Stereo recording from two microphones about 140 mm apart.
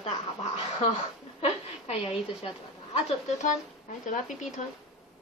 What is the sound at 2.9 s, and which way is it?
Speech, 45° left (ahead or behind).